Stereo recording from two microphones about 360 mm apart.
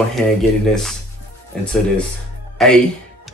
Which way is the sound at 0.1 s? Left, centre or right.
Centre.